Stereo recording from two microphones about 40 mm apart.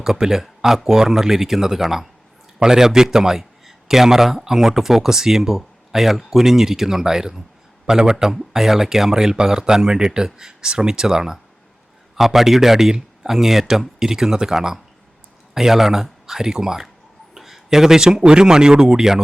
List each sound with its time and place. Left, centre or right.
0.0 s a man's voice: centre
17.3 s a sound: centre
18.3 s a man's voice: centre